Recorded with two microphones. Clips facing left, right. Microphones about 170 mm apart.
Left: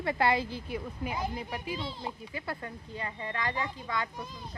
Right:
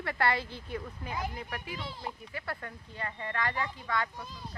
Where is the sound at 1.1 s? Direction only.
25° left (ahead or behind).